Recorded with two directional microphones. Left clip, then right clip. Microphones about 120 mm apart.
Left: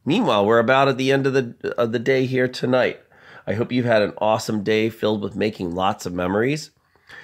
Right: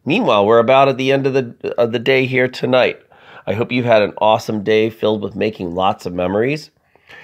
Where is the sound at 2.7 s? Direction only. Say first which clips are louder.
Right 6 dB; 45° left (ahead or behind).